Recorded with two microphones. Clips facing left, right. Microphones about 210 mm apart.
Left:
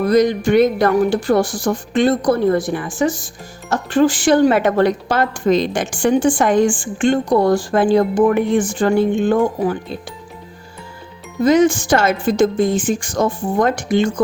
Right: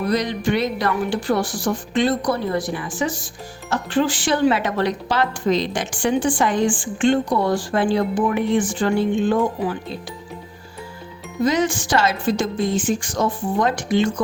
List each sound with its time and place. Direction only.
0.1 s speech: 45° left (ahead or behind)
11.4 s speech: 50° left (ahead or behind)